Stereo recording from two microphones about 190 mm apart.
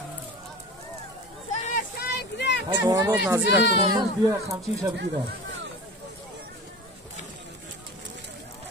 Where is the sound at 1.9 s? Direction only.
60° left (ahead or behind).